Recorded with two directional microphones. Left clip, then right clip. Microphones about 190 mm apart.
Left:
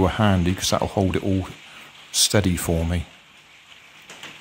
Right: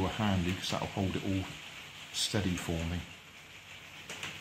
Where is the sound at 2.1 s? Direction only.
60° left (ahead or behind).